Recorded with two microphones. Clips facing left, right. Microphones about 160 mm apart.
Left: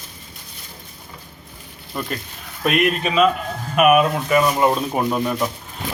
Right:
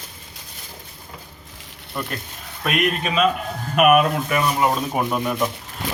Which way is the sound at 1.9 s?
Centre (ahead or behind).